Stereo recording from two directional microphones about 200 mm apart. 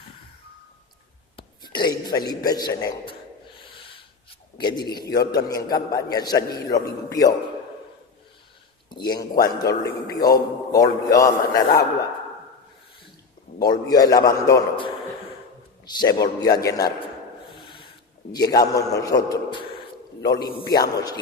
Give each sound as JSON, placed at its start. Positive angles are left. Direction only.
{"t": 1.4, "sound": "whispering", "side_deg": 20}
{"t": 2.0, "sound": "a man's voice", "side_deg": 20}
{"t": 3.6, "sound": "a sound", "side_deg": 25}
{"t": 4.5, "sound": "a man's voice", "side_deg": 20}
{"t": 8.9, "sound": "a man's voice", "side_deg": 20}
{"t": 13.7, "sound": "a man's voice", "side_deg": 20}
{"t": 16.0, "sound": "a man's voice", "side_deg": 20}
{"t": 17.5, "sound": "dog", "side_deg": 25}
{"t": 18.3, "sound": "a man's voice", "side_deg": 20}